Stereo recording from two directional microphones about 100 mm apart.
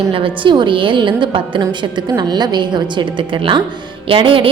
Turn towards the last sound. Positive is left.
turn(degrees=-60)  # may be behind; listen again after turning